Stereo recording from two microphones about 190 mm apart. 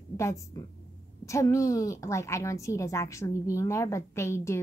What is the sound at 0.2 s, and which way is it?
A woman's voice, 15° left (ahead or behind).